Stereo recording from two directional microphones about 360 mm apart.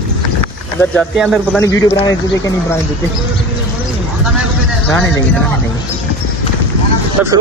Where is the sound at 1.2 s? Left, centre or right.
Centre.